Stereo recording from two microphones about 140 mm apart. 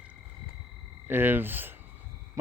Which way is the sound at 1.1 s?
15° right (ahead or behind).